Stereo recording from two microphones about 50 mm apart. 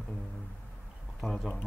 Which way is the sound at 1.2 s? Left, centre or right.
Centre.